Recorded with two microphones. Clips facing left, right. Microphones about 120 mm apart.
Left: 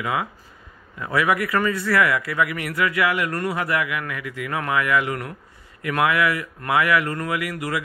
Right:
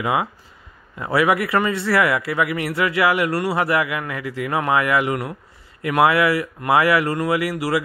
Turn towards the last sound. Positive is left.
turn(degrees=-30)  # may be behind; listen again after turning